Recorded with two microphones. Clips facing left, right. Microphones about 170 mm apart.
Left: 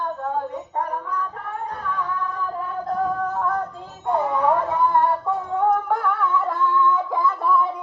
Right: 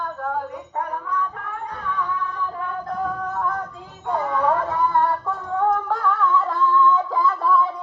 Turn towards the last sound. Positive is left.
turn(degrees=15)  # may be behind; listen again after turning